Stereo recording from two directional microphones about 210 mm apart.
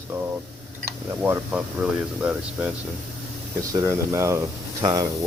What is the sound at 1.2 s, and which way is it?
Speech, 10° right (ahead or behind).